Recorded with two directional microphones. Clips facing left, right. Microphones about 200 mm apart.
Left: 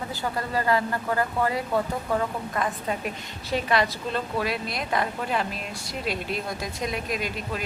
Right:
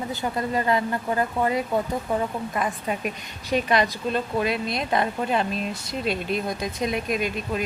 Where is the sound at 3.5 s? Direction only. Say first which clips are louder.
Right 2 dB; 15° right (ahead or behind).